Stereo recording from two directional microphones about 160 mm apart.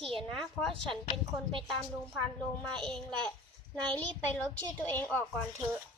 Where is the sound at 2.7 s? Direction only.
5° left (ahead or behind).